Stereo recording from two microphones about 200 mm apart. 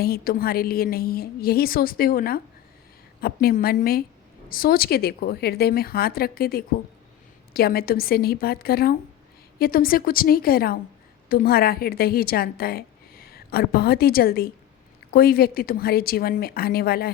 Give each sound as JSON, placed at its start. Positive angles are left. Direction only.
{"t": 0.0, "sound": "a woman's voice", "side_deg": 50}